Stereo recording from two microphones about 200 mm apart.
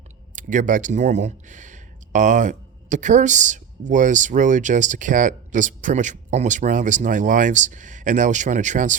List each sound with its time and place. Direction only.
0.3 s speech: 40° right (ahead or behind)